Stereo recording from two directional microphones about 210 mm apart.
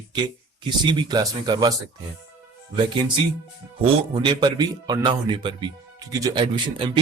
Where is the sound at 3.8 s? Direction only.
25° right (ahead or behind).